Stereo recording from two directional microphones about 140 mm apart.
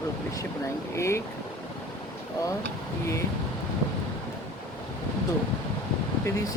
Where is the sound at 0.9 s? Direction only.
20° left (ahead or behind).